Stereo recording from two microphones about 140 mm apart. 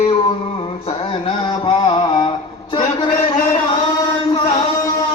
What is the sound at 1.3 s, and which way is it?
Mantra, 40° left (ahead or behind).